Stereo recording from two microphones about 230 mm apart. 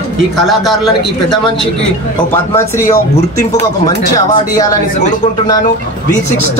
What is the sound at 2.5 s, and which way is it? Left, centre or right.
Speech, centre.